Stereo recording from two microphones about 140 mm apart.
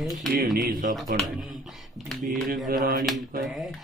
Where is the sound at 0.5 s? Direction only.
85° right.